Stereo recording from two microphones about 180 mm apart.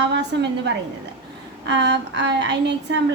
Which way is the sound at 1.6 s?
70° right (ahead or behind).